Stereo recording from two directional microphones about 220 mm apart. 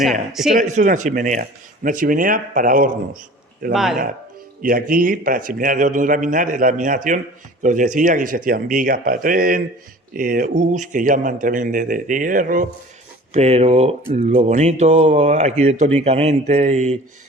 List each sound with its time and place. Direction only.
0.0 s a man's voice: centre (ahead or behind)
0.6 s a man's voice: 35° right (ahead or behind)
3.7 s a man's voice: centre (ahead or behind)
4.6 s a man's voice: 40° right (ahead or behind)